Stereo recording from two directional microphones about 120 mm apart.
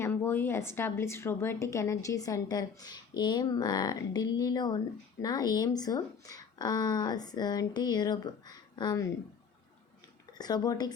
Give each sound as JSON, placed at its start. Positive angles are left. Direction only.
{"t": 0.0, "sound": "a woman's voice", "side_deg": 20}
{"t": 10.3, "sound": "speech", "side_deg": 35}